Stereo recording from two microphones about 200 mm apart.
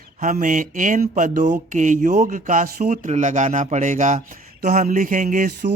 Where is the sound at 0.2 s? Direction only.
40° right (ahead or behind).